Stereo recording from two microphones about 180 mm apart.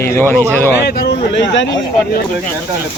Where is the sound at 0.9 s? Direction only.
65° left (ahead or behind).